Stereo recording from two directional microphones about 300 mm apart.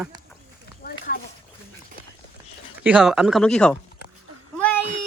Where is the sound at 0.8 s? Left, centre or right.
Left.